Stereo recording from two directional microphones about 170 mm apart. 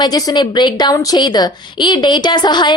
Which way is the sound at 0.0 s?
25° left (ahead or behind).